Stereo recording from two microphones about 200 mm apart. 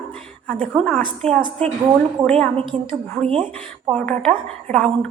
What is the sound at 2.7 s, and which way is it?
Speech, 40° right (ahead or behind).